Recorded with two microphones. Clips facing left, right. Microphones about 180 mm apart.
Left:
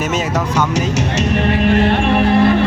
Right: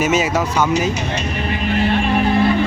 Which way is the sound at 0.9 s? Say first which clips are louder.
Left 6 dB; 80° left.